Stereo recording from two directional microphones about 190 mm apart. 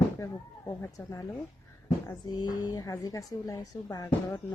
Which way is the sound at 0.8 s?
20° left (ahead or behind).